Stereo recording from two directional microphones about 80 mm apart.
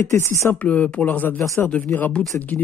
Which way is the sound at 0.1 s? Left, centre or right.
Left.